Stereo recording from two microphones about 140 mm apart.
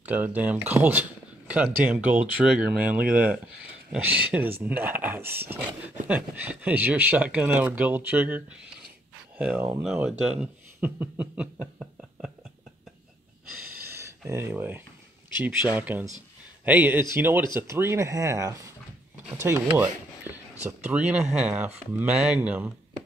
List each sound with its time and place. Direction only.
0.0 s speech: 10° right (ahead or behind)
14.3 s speech: 15° right (ahead or behind)